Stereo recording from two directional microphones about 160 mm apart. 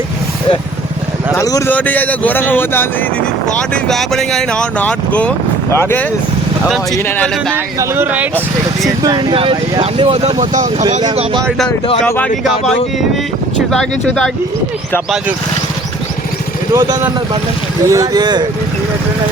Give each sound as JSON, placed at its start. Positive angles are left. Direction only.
{"t": 1.4, "sound": "speech", "side_deg": 20}
{"t": 6.7, "sound": "speech", "side_deg": 0}
{"t": 7.5, "sound": "speech", "side_deg": -15}
{"t": 9.0, "sound": "speech", "side_deg": -25}
{"t": 11.1, "sound": "speech", "side_deg": -40}
{"t": 11.4, "sound": "speech", "side_deg": 5}
{"t": 13.7, "sound": "speech", "side_deg": 5}
{"t": 16.7, "sound": "speech", "side_deg": -20}